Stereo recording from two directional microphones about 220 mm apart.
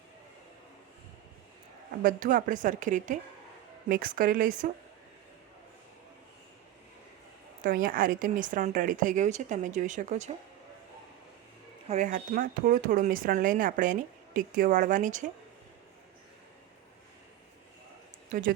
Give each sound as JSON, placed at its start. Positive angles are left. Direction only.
{"t": 2.0, "sound": "speech", "side_deg": -35}
{"t": 7.6, "sound": "speech", "side_deg": -40}
{"t": 11.9, "sound": "speech", "side_deg": -35}
{"t": 18.3, "sound": "speech", "side_deg": -35}